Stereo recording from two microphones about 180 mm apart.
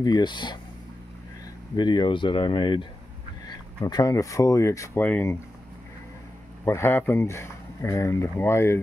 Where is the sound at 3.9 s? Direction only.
20° left (ahead or behind).